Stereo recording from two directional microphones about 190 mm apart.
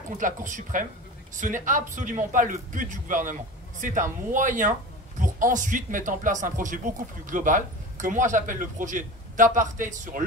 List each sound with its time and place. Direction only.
0.2 s speech: 40° right (ahead or behind)